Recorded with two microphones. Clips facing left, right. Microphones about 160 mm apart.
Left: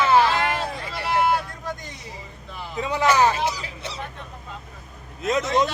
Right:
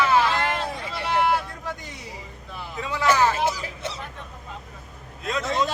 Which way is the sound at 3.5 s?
50° right (ahead or behind).